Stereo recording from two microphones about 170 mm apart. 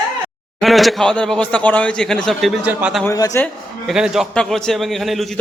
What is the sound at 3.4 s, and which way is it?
A man's voice, centre (ahead or behind).